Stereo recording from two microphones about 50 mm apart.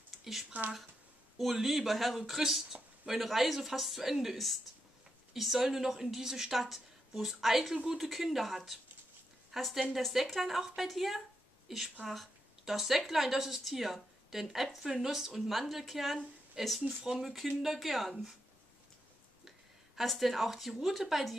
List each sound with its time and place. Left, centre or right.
0.2 s speech: centre
0.5 s speech: right
1.4 s a woman's voice: centre
16.8 s a woman's voice: centre
20.0 s speech: centre